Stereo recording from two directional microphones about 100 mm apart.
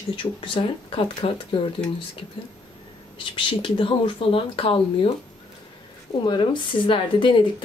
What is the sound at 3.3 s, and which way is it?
Speech, 60° left (ahead or behind).